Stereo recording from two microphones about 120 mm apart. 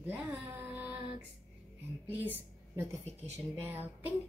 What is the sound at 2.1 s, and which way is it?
A woman's voice, 15° right (ahead or behind).